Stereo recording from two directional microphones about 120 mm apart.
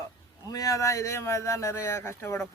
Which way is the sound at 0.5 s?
30° left (ahead or behind).